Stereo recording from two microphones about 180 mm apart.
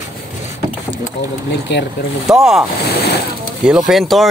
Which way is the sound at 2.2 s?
Centre (ahead or behind).